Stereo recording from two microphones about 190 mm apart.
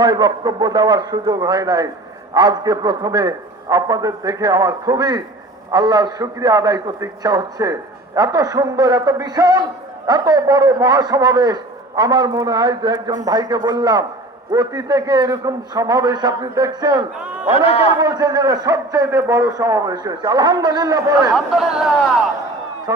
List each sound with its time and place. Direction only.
0.0 s a man's voice: 20° right (ahead or behind)
17.5 s a man's voice: 30° left (ahead or behind)
18.0 s a man's voice: 20° right (ahead or behind)
21.3 s speech: centre (ahead or behind)